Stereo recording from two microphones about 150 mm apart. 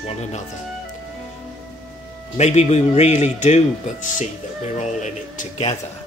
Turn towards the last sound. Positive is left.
turn(degrees=50)  # may be behind; listen again after turning